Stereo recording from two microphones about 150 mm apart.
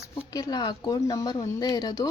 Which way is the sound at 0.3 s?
25° left (ahead or behind).